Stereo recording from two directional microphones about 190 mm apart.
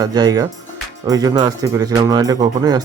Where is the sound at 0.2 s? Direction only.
20° right (ahead or behind).